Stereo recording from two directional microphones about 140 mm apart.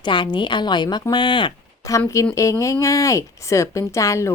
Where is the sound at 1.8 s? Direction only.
25° left (ahead or behind).